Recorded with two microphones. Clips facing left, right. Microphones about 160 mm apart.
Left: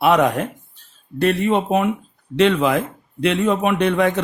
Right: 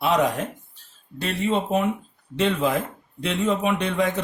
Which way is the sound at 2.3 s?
80° left.